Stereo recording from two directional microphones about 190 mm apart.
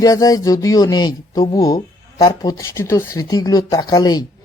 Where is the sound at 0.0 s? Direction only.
20° left (ahead or behind).